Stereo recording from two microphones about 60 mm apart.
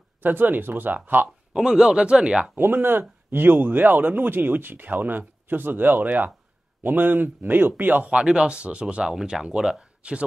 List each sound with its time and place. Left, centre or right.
0.2 s speech: right
1.5 s speech: centre
2.5 s speech: right
8.1 s speech: centre